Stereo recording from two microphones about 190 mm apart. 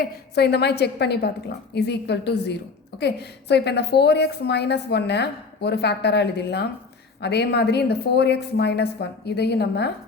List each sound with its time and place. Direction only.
0.0 s a woman's voice: 60° left (ahead or behind)